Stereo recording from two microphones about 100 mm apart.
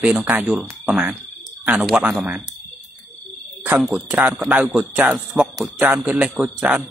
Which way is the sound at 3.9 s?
10° right (ahead or behind).